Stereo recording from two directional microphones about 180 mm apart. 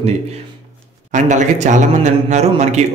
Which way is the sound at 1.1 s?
40° right (ahead or behind).